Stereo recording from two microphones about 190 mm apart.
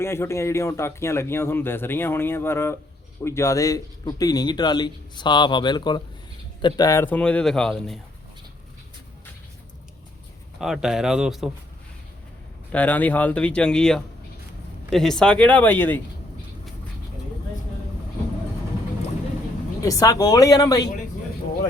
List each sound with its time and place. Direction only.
0.0 s a man's voice: 15° left (ahead or behind)
10.6 s speech: centre (ahead or behind)
12.7 s speech: 10° left (ahead or behind)
19.8 s a man's voice: 20° left (ahead or behind)